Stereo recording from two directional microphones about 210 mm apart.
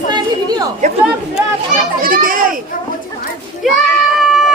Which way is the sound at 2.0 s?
40° right (ahead or behind).